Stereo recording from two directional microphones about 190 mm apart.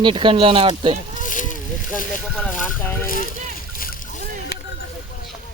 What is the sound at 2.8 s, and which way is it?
Speech, 10° left (ahead or behind).